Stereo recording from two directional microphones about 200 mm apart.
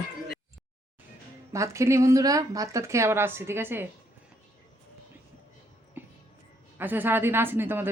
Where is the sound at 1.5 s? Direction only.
15° right (ahead or behind).